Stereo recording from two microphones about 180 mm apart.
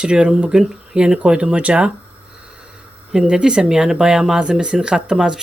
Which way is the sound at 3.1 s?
5° right (ahead or behind).